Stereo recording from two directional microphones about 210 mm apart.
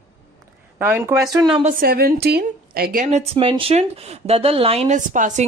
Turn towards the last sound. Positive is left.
turn(degrees=-35)  # may be behind; listen again after turning